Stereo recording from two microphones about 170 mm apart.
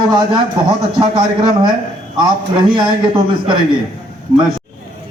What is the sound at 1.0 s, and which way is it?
A man's voice, 30° right (ahead or behind).